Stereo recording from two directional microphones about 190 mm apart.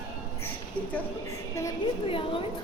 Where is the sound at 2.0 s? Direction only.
30° left (ahead or behind).